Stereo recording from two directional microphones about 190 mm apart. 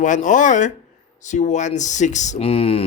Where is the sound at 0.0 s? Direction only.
40° left (ahead or behind).